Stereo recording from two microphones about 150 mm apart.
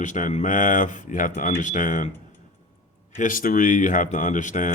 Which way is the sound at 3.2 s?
65° left (ahead or behind).